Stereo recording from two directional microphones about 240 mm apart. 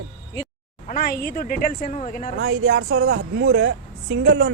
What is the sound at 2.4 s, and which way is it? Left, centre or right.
A woman's voice, right.